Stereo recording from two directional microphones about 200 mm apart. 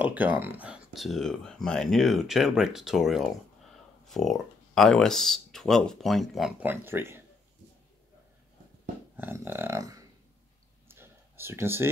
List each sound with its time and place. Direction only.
0.0 s speech: 10° right (ahead or behind)
9.1 s burping: 10° right (ahead or behind)
10.9 s a sound: 10° right (ahead or behind)